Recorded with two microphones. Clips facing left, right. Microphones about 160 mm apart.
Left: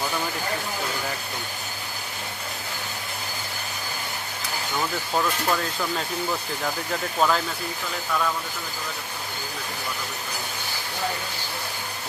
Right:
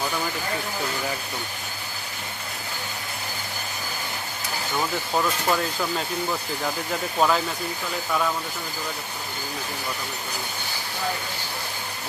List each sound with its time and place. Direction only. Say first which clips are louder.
5.1 s speech: right 1 dB; 5° right (ahead or behind)
7.2 s speech: right 1 dB; 5° right (ahead or behind)